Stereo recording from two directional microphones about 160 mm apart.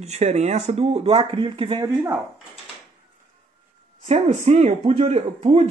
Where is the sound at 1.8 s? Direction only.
15° right (ahead or behind).